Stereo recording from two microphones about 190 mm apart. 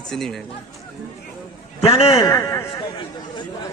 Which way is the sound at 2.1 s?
15° left (ahead or behind).